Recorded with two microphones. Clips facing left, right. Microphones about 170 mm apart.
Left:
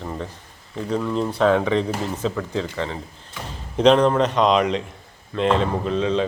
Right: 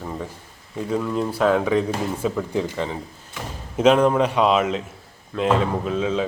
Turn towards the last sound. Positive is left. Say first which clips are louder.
# left 1 dB
turn(degrees=-5)  # may be behind; listen again after turning